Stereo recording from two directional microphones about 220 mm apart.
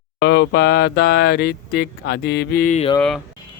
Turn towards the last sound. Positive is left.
turn(degrees=0)  # may be behind; listen again after turning